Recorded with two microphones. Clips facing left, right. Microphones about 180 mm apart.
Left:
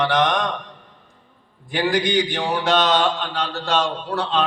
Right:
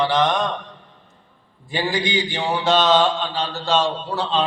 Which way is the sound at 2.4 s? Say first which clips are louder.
Right 4 dB; 25° right (ahead or behind).